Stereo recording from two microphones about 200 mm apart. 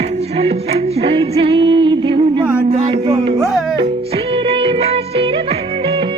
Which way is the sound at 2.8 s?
30° right (ahead or behind).